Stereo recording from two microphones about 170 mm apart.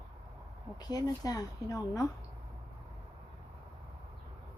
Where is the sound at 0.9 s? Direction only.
20° left (ahead or behind).